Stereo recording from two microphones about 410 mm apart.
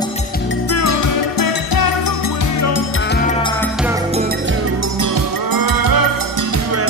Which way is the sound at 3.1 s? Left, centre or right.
Centre.